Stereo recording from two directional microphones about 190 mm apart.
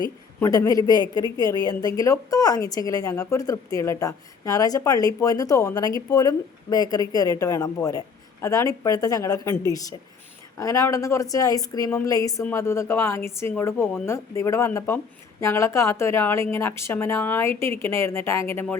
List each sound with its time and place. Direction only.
0.3 s a woman's voice: 15° left (ahead or behind)